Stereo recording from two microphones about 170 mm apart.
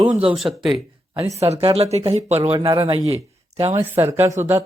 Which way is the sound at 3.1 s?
35° right (ahead or behind).